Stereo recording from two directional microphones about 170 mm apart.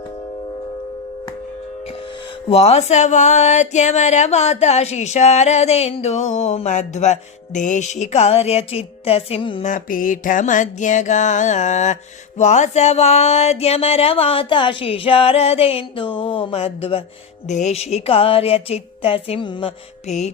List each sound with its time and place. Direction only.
2.5 s speech: 40° left (ahead or behind)
9.6 s music: 50° left (ahead or behind)
12.4 s speech: 45° left (ahead or behind)
20.1 s speech: 40° left (ahead or behind)